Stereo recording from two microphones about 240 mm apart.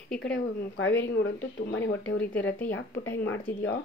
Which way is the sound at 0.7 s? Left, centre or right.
Left.